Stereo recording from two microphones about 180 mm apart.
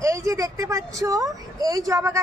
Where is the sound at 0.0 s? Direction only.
15° right (ahead or behind).